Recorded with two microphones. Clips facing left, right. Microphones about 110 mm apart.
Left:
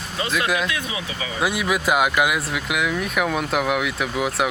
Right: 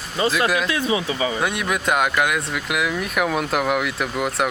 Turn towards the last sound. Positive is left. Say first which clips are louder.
# even
turn(degrees=0)  # may be behind; listen again after turning